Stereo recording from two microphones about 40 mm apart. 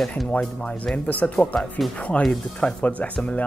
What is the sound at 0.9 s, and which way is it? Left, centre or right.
Speech, left.